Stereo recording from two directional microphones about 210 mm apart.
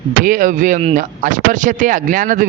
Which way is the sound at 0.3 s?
40° right (ahead or behind).